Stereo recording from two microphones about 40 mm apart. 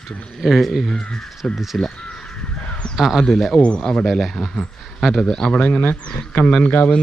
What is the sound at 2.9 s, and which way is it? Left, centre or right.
Speech, centre.